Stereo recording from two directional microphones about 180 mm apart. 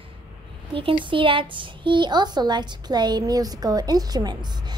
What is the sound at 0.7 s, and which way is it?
Speech, 30° right (ahead or behind).